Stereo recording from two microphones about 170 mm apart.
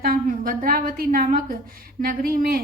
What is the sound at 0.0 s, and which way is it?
A woman's voice, 60° right (ahead or behind).